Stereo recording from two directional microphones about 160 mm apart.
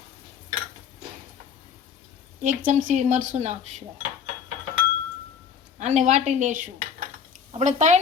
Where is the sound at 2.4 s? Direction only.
55° right (ahead or behind).